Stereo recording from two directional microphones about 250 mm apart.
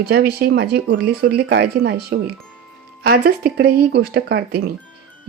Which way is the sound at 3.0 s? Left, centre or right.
Right.